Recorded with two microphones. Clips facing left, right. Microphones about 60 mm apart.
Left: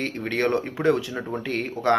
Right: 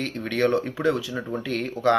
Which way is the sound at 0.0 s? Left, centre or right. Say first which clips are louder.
Right 1 dB; left.